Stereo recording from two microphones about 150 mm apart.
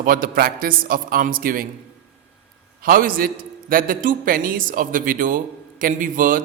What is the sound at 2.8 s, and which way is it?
A man's voice, 70° right (ahead or behind).